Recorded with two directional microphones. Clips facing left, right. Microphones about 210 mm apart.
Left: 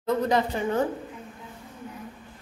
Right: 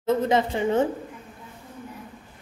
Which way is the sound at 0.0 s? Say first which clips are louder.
Right 2 dB; 25° right (ahead or behind).